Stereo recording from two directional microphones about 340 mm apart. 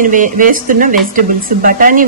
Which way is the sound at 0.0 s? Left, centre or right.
Right.